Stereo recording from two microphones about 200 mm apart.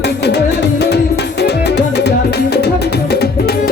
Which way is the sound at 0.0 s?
55° left (ahead or behind).